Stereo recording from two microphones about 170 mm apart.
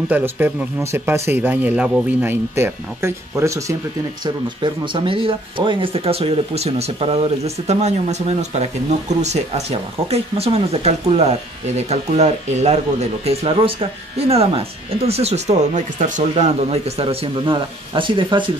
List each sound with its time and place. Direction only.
0.1 s speech: 10° right (ahead or behind)
4.2 s speech: 30° right (ahead or behind)